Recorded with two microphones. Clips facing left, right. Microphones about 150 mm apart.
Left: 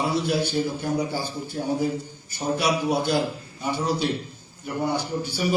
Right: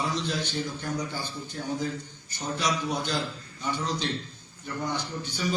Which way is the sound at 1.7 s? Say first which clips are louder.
Left 6 dB; 10° left (ahead or behind).